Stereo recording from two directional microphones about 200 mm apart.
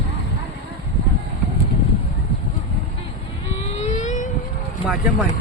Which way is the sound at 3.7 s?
35° left (ahead or behind).